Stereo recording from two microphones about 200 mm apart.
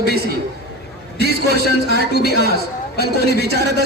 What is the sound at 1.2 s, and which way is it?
A man's voice, 55° left (ahead or behind).